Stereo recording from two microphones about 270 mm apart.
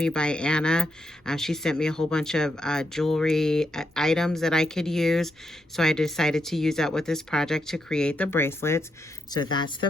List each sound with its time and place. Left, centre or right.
0.0 s speech: centre